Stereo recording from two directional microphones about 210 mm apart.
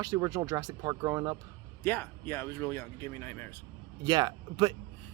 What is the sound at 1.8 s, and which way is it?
Speech, 10° left (ahead or behind).